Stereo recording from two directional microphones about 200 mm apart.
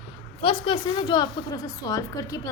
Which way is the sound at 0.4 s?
25° left (ahead or behind).